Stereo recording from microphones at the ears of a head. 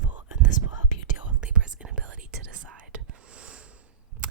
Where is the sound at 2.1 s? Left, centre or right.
Right.